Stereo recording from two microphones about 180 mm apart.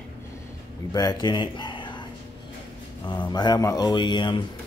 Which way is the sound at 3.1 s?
25° left (ahead or behind).